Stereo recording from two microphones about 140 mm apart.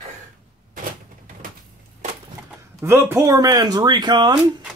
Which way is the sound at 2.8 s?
20° right (ahead or behind).